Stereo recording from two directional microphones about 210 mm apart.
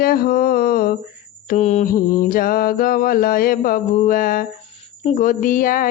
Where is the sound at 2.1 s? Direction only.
45° left (ahead or behind).